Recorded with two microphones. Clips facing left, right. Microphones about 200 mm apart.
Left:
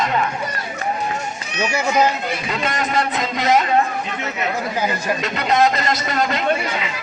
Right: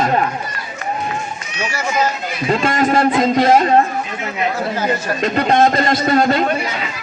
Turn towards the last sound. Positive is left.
turn(degrees=-35)  # may be behind; listen again after turning